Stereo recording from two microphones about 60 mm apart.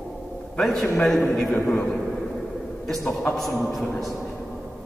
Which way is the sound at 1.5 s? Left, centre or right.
Left.